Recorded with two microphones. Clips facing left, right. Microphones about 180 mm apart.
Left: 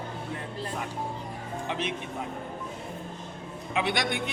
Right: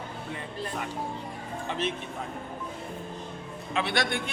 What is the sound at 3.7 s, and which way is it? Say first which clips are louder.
Speech: even; 15° left (ahead or behind).